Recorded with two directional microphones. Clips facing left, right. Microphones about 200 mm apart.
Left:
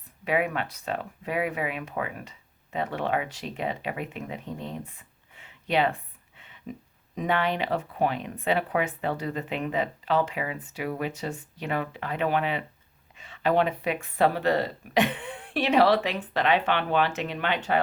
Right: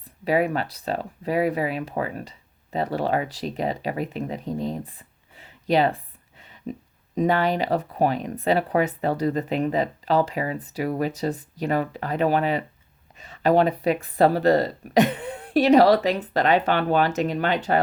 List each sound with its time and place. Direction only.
0.3 s speech: 35° right (ahead or behind)